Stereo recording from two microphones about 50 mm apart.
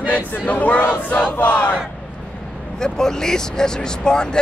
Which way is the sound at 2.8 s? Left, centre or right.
Centre.